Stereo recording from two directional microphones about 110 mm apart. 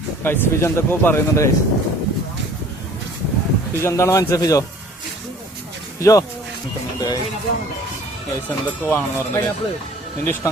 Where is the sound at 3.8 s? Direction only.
25° left (ahead or behind).